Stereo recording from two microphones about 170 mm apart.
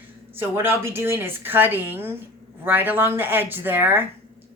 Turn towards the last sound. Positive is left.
turn(degrees=-10)  # may be behind; listen again after turning